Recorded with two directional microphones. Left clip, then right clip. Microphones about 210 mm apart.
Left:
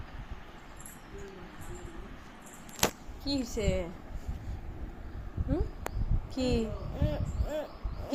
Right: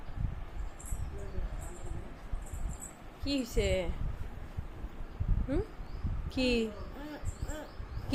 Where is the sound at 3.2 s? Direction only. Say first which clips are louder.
Left 1 dB; 30° right (ahead or behind).